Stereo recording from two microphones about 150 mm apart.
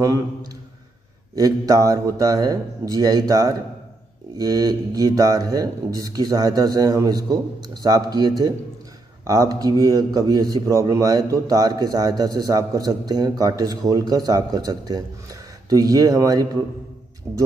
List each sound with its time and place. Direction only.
1.3 s a man's voice: 25° right (ahead or behind)